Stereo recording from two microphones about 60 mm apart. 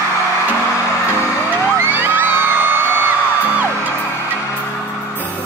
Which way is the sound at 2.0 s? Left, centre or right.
Right.